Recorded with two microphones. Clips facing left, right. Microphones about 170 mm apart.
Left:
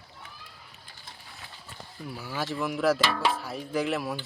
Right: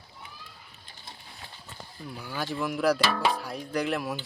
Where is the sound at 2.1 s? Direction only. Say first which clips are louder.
Left 1 dB; centre (ahead or behind).